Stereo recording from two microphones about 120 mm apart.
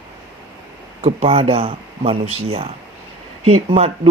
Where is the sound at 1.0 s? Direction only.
55° right (ahead or behind).